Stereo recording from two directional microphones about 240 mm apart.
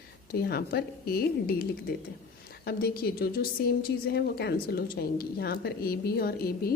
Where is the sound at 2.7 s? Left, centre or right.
Left.